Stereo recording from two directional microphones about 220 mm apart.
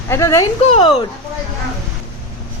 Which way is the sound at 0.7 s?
25° left (ahead or behind).